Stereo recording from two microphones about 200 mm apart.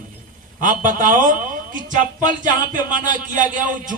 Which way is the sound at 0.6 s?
40° right (ahead or behind).